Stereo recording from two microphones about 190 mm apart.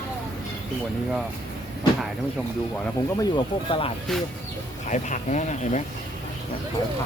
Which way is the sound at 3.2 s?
25° left (ahead or behind).